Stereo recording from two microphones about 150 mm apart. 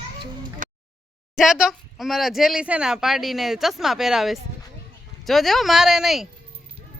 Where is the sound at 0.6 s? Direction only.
60° right (ahead or behind).